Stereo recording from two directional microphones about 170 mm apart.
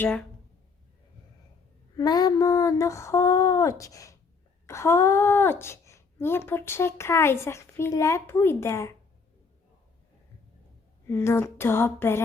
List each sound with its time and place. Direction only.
0.0 s speech: 5° left (ahead or behind)
2.0 s a sound: 25° left (ahead or behind)
4.6 s speech: 15° left (ahead or behind)
11.0 s speech: 15° left (ahead or behind)